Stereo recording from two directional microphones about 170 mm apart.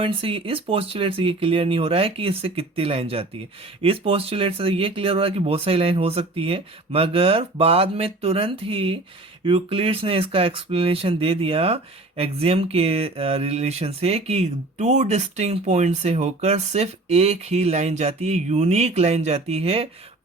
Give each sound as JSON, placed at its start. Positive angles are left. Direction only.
{"t": 0.0, "sound": "speech", "side_deg": -35}